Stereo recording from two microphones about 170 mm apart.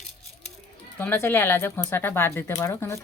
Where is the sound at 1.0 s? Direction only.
10° left (ahead or behind).